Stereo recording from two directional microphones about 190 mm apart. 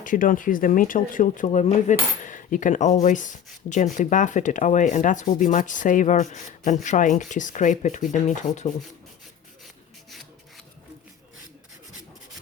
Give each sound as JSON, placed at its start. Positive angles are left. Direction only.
{"t": 0.0, "sound": "speech", "side_deg": 45}
{"t": 3.9, "sound": "sanding", "side_deg": 40}